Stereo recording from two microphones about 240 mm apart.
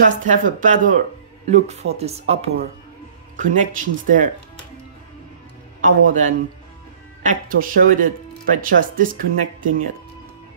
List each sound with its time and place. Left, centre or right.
0.3 s speech: right
5.8 s a man's voice: right